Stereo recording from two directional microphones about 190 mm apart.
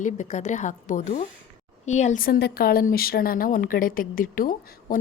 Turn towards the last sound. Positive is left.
turn(degrees=45)  # may be behind; listen again after turning